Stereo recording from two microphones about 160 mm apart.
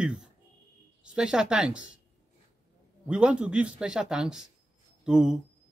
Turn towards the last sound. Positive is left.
turn(degrees=-5)  # may be behind; listen again after turning